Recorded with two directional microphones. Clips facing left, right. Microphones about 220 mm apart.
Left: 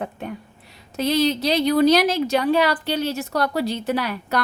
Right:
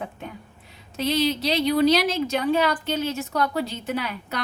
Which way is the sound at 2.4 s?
70° left (ahead or behind).